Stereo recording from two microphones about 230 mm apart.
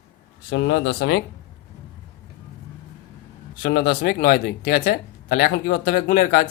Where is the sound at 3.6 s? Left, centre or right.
Left.